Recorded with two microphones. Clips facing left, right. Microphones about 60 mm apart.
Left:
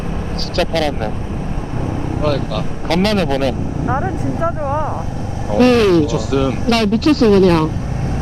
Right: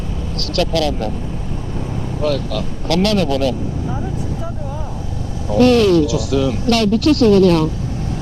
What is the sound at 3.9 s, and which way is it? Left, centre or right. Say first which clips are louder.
Vehicle: left 5 dB; left.